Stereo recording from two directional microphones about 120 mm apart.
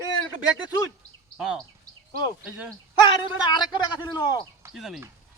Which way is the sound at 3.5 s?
35° left (ahead or behind).